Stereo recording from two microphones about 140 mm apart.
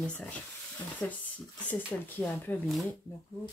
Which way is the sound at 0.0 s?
10° left (ahead or behind).